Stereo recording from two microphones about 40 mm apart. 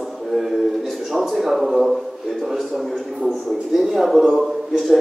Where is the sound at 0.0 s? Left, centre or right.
Centre.